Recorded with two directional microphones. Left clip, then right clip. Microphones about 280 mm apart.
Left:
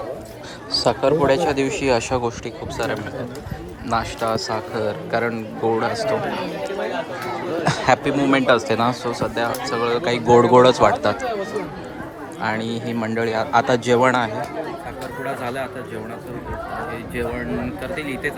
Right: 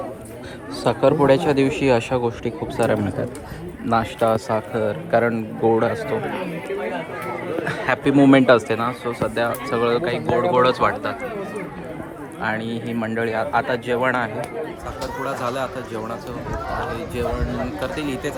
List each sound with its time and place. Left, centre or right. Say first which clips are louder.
0.9 s speech: right 2 dB; centre
7.6 s a sound: left 5 dB; centre
8.0 s speech: right 3 dB; centre
12.4 s speech: left 1 dB; centre
17.9 s speech: left 1 dB; centre